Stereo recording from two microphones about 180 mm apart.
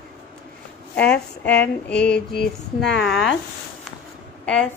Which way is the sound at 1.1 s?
10° left (ahead or behind).